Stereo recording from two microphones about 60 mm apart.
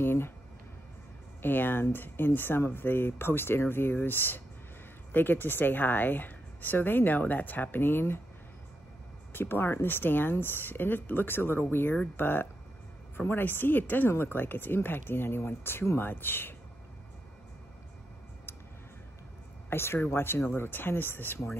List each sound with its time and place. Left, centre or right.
0.0 s speech: left
1.4 s speech: left
9.3 s speech: left
19.7 s speech: left